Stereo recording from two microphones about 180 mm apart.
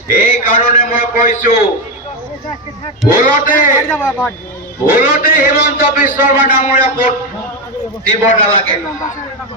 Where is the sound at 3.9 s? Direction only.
5° left (ahead or behind).